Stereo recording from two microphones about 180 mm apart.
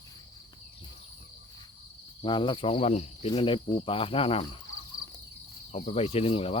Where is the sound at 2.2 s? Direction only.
25° left (ahead or behind).